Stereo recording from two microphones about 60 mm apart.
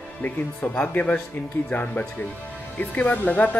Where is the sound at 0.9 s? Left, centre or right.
Left.